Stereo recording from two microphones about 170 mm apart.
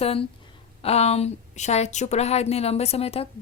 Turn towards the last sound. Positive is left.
turn(degrees=35)  # may be behind; listen again after turning